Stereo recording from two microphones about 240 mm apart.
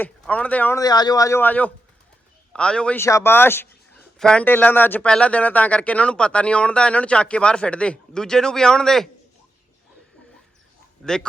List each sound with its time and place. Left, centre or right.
0.0 s a man's voice: centre
11.0 s a man's voice: centre